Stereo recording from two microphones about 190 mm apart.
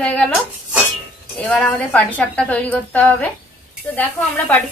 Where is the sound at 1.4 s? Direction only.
5° left (ahead or behind).